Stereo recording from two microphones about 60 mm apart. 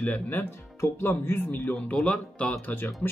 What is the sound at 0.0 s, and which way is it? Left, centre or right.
Speech, left.